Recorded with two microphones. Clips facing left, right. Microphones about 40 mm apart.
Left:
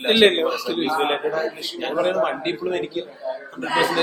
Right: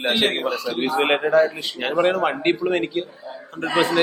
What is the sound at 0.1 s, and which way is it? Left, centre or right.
Speech, left.